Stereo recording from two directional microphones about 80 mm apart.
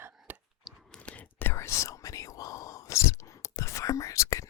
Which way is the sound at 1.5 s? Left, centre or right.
Left.